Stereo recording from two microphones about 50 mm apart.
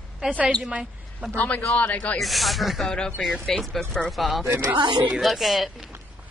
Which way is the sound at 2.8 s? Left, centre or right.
Centre.